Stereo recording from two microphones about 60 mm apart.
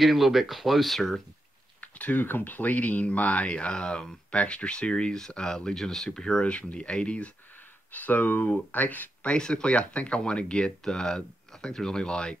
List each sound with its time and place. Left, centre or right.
0.0 s speech: centre
1.8 s speech: left
7.9 s speech: left
9.2 s speech: centre